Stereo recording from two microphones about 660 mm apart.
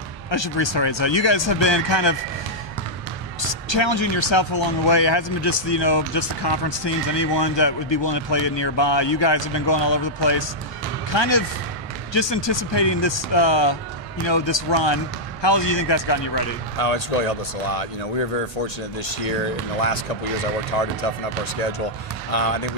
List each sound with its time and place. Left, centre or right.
0.3 s speech: left
3.4 s speech: left
16.7 s speech: left
19.0 s speech: left
22.3 s speech: left